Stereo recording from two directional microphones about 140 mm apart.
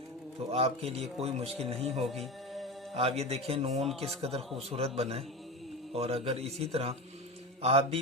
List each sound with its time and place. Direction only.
0.5 s speech: 45° right (ahead or behind)
2.0 s music: centre (ahead or behind)
2.9 s speech: 45° right (ahead or behind)